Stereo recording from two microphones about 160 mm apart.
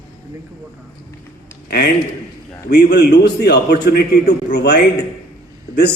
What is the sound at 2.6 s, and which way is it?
A man's voice, 85° left.